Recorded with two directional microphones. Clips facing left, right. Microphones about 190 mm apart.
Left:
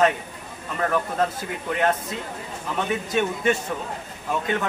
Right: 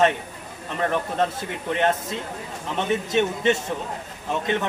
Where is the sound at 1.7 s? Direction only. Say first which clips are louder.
Right 1 dB; 25° right (ahead or behind).